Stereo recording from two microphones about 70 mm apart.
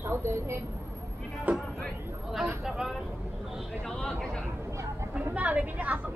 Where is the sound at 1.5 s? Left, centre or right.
Right.